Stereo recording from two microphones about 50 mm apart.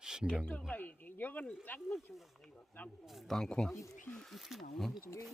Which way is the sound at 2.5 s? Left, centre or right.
Left.